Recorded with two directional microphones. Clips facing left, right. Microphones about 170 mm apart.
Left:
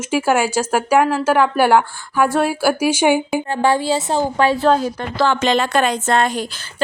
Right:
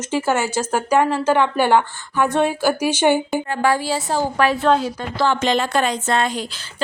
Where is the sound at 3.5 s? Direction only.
25° left (ahead or behind).